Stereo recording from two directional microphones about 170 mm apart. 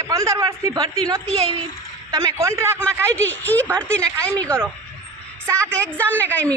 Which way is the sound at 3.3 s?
10° left (ahead or behind).